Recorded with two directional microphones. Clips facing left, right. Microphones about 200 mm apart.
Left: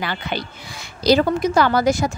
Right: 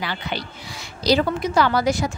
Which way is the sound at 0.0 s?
50° left (ahead or behind).